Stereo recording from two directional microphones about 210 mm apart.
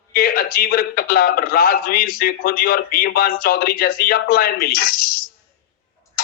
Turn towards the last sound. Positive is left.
turn(degrees=45)  # may be behind; listen again after turning